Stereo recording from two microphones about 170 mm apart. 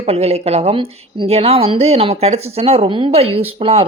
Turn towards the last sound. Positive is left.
turn(degrees=-35)  # may be behind; listen again after turning